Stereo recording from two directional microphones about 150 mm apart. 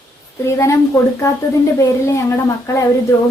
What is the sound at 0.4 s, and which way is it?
Speech, 20° left (ahead or behind).